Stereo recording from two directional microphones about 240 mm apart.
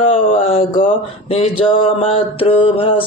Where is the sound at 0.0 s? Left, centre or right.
Left.